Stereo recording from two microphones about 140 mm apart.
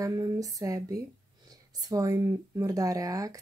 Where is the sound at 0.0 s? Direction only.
25° right (ahead or behind).